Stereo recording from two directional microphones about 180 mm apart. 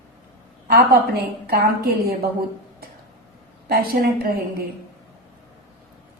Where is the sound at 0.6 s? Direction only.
60° right (ahead or behind).